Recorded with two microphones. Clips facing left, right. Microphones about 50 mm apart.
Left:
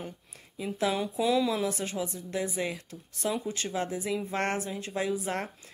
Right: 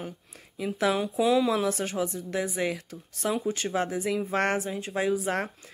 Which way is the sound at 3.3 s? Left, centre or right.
Centre.